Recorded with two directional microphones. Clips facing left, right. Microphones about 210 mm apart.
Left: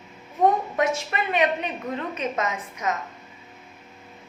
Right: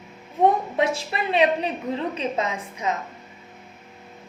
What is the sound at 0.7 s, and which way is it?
A woman's voice, 30° right (ahead or behind).